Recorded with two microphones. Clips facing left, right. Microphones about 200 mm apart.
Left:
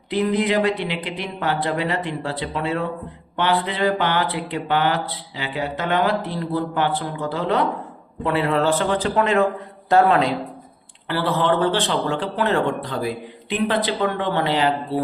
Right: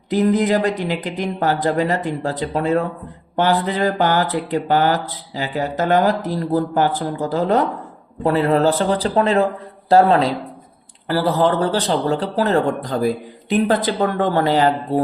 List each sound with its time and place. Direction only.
0.1 s a man's voice: 45° right (ahead or behind)